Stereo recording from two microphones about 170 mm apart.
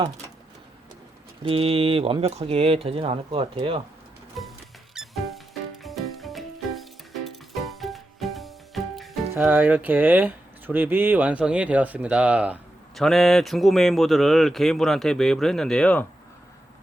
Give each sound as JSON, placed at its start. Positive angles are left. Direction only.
{"t": 1.5, "sound": "speech", "side_deg": -35}
{"t": 4.4, "sound": "music", "side_deg": 0}
{"t": 9.5, "sound": "speech", "side_deg": -10}